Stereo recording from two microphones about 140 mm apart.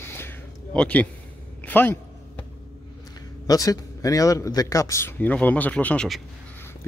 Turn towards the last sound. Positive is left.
turn(degrees=10)  # may be behind; listen again after turning